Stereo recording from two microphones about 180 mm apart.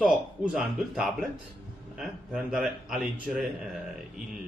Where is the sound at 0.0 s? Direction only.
5° right (ahead or behind).